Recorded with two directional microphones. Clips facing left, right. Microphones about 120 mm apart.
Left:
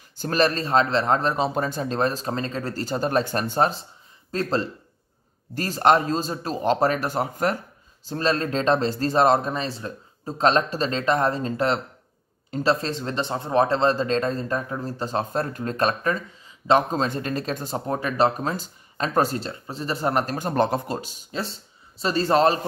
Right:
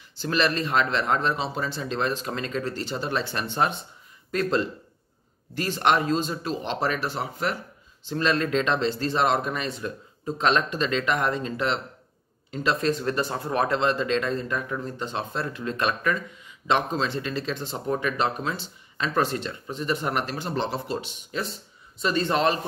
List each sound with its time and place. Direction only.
0.1 s speech: 45° left (ahead or behind)